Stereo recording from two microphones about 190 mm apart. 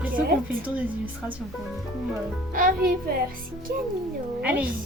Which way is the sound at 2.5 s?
45° right (ahead or behind).